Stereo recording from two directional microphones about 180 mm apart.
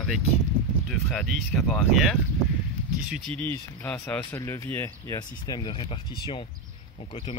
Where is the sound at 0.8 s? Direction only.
Centre (ahead or behind).